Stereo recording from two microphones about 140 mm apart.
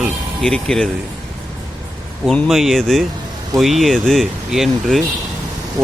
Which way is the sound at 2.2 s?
Centre (ahead or behind).